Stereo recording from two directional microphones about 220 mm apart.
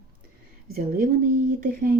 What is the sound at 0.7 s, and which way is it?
Speech, 40° right (ahead or behind).